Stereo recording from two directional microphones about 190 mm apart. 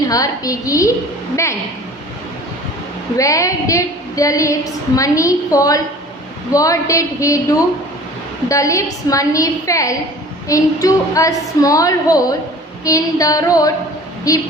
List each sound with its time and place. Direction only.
0.1 s a woman's voice: 20° left (ahead or behind)
3.2 s a woman's voice: 15° left (ahead or behind)
8.4 s a woman's voice: 15° left (ahead or behind)